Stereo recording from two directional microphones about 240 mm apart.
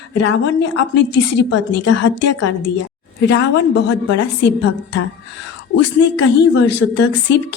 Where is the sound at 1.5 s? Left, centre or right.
Left.